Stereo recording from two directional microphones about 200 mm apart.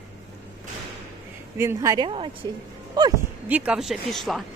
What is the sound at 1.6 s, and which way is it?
Speech, 15° right (ahead or behind).